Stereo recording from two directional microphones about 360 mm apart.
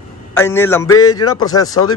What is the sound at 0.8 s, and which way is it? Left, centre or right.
Speech, left.